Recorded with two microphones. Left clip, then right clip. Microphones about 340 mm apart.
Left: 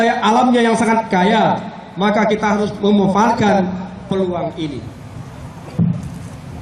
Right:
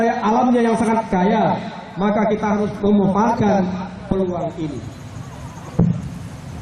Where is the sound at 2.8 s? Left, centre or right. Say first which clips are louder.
Left 1 dB; centre.